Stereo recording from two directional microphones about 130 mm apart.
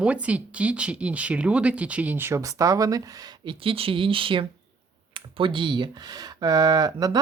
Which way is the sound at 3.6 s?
45° right (ahead or behind).